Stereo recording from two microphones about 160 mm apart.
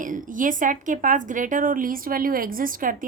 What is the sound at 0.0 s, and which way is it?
A woman's voice, 55° right (ahead or behind).